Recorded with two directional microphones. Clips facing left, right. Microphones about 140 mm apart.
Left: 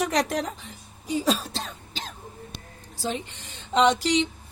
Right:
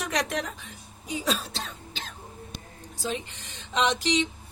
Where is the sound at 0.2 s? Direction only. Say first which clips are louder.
Left 4 dB; 40° left (ahead or behind).